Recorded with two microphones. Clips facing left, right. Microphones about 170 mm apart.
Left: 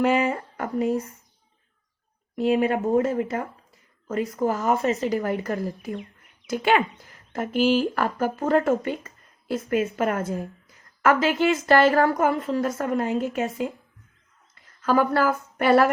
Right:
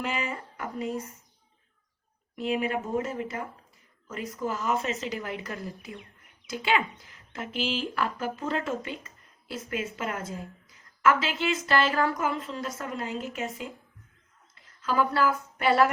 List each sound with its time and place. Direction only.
0.0 s speech: 60° left (ahead or behind)
2.4 s a woman's voice: 60° left (ahead or behind)